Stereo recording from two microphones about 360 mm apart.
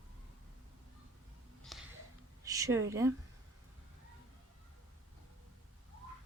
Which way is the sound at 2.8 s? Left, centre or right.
Centre.